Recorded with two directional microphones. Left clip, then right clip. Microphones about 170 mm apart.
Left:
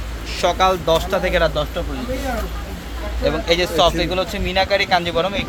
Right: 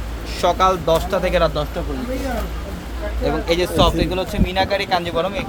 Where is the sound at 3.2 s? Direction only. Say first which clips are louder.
Left 2 dB; 10° left (ahead or behind).